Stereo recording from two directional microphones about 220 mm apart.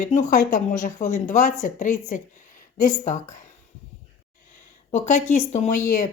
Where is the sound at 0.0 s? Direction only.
35° left (ahead or behind).